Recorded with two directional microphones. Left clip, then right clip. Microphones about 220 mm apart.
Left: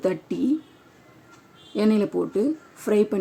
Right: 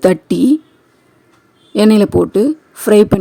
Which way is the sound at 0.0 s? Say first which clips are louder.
Right 13 dB; 50° right (ahead or behind).